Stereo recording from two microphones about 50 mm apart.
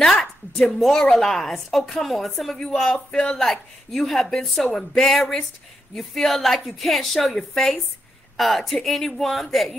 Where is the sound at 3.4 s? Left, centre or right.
Centre.